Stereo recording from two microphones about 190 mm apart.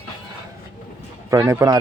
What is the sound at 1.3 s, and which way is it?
Speech, 15° right (ahead or behind).